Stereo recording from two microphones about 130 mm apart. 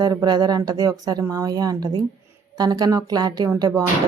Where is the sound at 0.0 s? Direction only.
30° right (ahead or behind).